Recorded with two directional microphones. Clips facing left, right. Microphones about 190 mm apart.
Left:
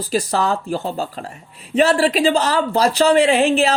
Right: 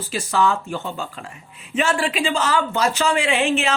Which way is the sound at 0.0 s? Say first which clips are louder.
Left 1 dB; 40° left (ahead or behind).